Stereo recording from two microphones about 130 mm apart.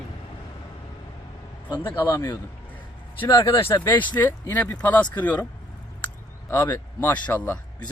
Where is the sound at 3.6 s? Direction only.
25° left (ahead or behind).